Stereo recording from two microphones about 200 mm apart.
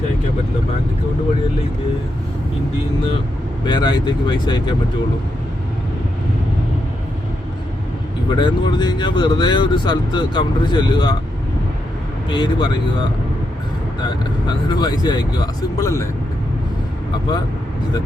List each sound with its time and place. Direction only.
3.7 s speech: 20° left (ahead or behind)
8.3 s speech: 25° left (ahead or behind)
12.3 s speech: 25° left (ahead or behind)
14.7 s speech: 20° left (ahead or behind)